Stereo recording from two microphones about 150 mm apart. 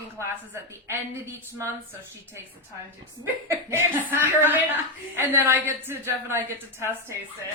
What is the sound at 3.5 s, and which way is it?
A woman's voice, 15° right (ahead or behind).